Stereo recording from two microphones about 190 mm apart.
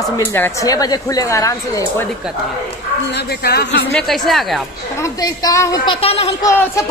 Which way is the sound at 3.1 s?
55° left (ahead or behind).